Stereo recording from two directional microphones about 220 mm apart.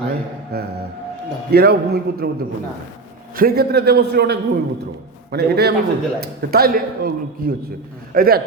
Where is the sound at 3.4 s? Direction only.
45° right (ahead or behind).